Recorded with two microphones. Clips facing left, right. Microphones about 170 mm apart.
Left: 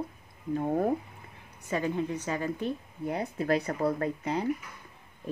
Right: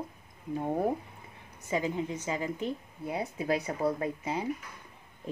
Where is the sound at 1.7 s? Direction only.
15° right (ahead or behind).